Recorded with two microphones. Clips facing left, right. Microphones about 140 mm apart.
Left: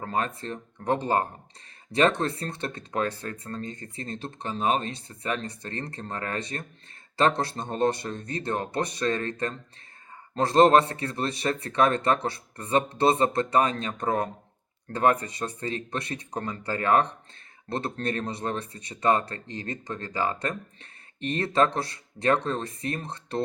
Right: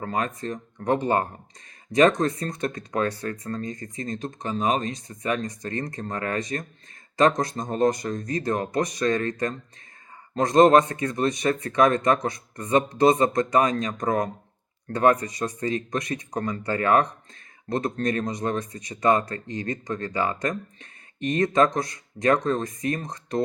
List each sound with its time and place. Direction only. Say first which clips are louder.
0.0 s speech: right 2 dB; 30° left (ahead or behind)